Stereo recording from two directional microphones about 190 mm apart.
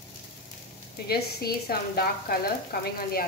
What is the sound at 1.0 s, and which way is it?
Speech, 55° left (ahead or behind).